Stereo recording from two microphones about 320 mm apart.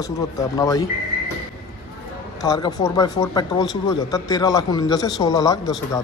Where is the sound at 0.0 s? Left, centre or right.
Centre.